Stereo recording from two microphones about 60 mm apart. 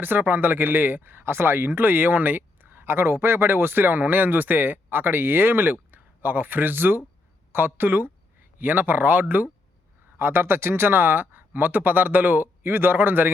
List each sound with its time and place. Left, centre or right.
0.0 s speech: right